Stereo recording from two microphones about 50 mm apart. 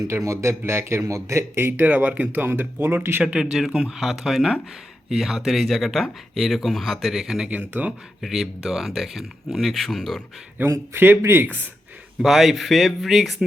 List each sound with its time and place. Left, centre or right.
0.3 s a man's voice: right
1.5 s speech: right
1.8 s speech: right
3.4 s a man's voice: centre
7.4 s speech: right
8.2 s speech: centre
10.6 s speech: right
12.2 s speech: centre